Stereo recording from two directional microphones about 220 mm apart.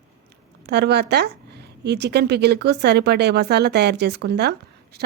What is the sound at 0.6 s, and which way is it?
A woman's voice, 50° right (ahead or behind).